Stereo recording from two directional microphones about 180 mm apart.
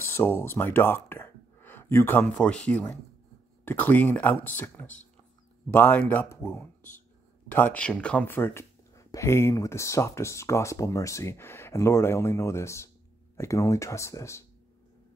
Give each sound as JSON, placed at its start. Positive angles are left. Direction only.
{"t": 0.0, "sound": "speech", "side_deg": 10}